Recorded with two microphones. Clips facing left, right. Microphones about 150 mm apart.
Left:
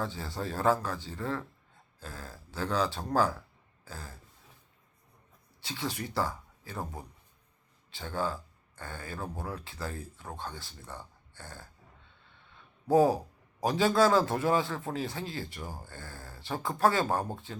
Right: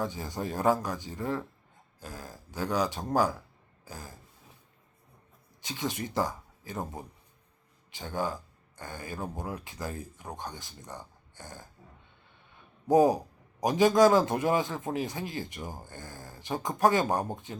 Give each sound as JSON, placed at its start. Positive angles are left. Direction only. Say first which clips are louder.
{"t": 0.0, "sound": "a man's voice", "louder": "right 2 dB", "side_deg": -15}
{"t": 5.6, "sound": "a man's voice", "louder": "right 2 dB", "side_deg": -20}
{"t": 12.9, "sound": "a man's voice", "louder": "right 2 dB", "side_deg": -15}